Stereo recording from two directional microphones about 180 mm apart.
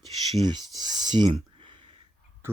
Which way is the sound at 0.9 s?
25° right (ahead or behind).